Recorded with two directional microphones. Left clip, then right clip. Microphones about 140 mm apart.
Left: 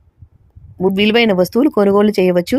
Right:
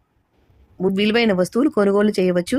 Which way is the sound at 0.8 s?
30° left (ahead or behind).